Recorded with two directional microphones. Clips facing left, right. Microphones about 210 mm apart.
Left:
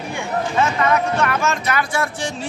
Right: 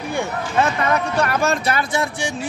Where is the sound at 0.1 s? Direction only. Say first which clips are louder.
Even; 35° right (ahead or behind).